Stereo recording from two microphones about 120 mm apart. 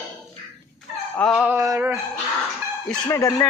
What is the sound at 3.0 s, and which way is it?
Speech, 25° left (ahead or behind).